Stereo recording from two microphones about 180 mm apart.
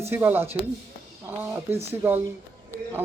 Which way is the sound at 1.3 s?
10° right (ahead or behind).